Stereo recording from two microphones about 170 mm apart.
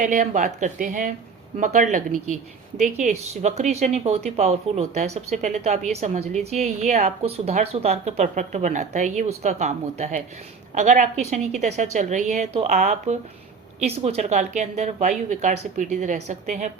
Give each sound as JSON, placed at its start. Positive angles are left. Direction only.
{"t": 0.0, "sound": "speech", "side_deg": -45}